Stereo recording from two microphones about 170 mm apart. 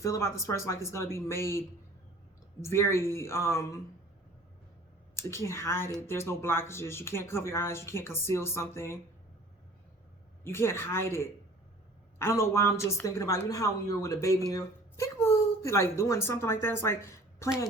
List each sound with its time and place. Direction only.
0.0 s speech: 15° left (ahead or behind)
5.1 s speech: 15° left (ahead or behind)
10.4 s speech: 15° left (ahead or behind)